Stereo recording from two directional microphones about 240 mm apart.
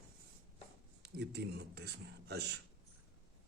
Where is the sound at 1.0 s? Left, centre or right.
Right.